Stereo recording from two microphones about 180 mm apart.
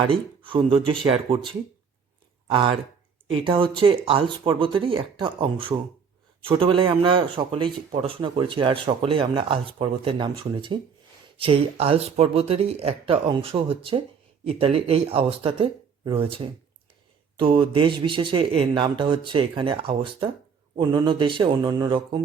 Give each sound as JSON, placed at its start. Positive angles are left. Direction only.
{"t": 0.1, "sound": "speech", "side_deg": -30}